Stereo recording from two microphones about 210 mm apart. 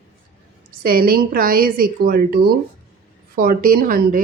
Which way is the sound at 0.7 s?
45° right (ahead or behind).